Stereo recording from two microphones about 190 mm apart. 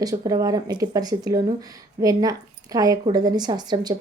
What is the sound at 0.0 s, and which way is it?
Speech, 20° right (ahead or behind).